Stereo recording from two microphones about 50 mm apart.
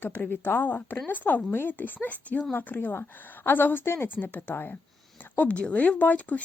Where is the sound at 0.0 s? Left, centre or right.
Left.